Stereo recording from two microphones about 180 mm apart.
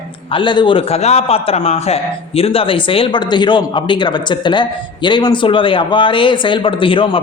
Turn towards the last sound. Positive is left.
turn(degrees=30)  # may be behind; listen again after turning